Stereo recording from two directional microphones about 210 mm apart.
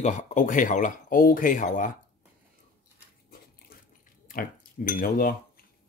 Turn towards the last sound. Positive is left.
turn(degrees=45)  # may be behind; listen again after turning